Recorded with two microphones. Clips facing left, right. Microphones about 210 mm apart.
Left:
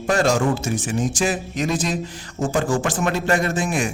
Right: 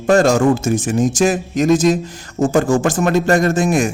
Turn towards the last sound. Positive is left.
turn(degrees=-45)  # may be behind; listen again after turning